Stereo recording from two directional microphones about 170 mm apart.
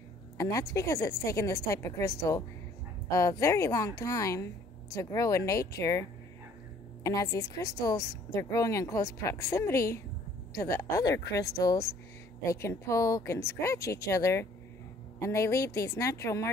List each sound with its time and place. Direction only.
0.4 s a woman's voice: 20° left (ahead or behind)